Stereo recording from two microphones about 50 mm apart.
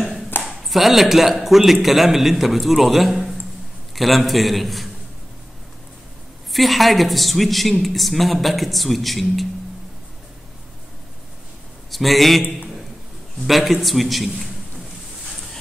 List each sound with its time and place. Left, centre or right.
0.3 s a sound: left
0.7 s a woman's voice: centre
6.5 s a woman's voice: centre
11.9 s a woman's voice: centre
13.5 s a woman's voice: centre